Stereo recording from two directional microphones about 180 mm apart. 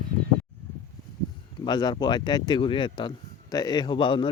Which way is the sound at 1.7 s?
25° left (ahead or behind).